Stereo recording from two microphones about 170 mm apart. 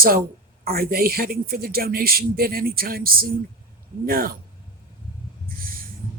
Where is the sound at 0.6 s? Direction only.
60° right (ahead or behind).